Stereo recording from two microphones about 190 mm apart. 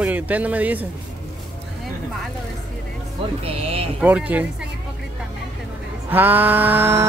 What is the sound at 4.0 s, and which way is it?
Speech, 10° right (ahead or behind).